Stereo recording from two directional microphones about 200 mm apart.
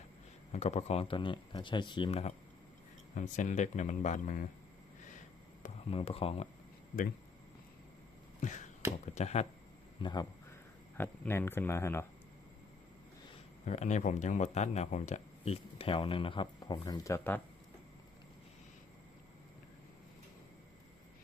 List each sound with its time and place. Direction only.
0.5 s speech: 35° left (ahead or behind)
5.6 s speech: 30° left (ahead or behind)
8.4 s finger snapping: 40° left (ahead or behind)
9.1 s speech: 35° left (ahead or behind)
10.0 s speech: 20° left (ahead or behind)
10.9 s speech: 10° left (ahead or behind)
13.7 s speech: 35° left (ahead or behind); by 17.4 s 10° left (ahead or behind)